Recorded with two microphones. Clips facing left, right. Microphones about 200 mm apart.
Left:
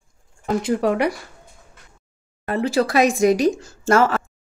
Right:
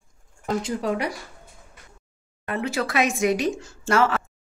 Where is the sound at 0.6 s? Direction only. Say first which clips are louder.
Left 8 dB; 65° left (ahead or behind).